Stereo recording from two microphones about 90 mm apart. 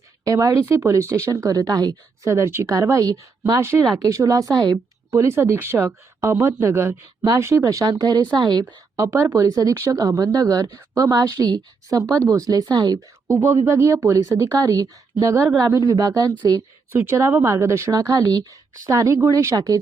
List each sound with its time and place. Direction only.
0.3 s speech: 35° right (ahead or behind)
5.2 s speech: 30° right (ahead or behind)
6.1 s speech: 35° right (ahead or behind); by 8.6 s 50° right (ahead or behind)
9.0 s speech: 35° right (ahead or behind)